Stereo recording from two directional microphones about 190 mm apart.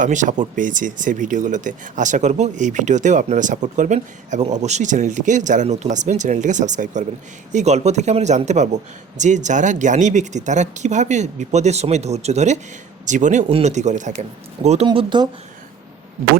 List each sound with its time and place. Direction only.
0.0 s speech: 40° right (ahead or behind)
14.8 s speech: 25° right (ahead or behind)